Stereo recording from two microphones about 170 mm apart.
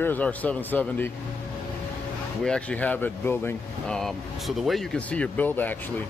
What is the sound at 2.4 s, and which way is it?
Speech, 5° left (ahead or behind).